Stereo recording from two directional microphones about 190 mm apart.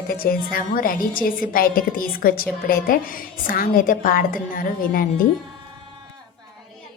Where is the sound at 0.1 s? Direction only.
50° left (ahead or behind).